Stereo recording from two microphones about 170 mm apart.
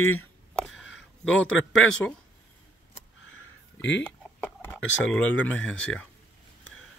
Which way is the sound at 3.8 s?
90° left.